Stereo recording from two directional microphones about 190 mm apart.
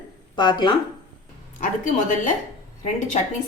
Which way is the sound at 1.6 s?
40° left (ahead or behind).